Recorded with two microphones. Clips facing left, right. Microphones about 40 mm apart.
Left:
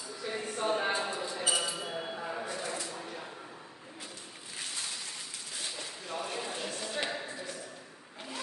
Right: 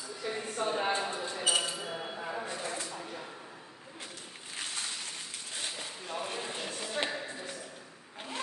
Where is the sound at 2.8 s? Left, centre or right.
Centre.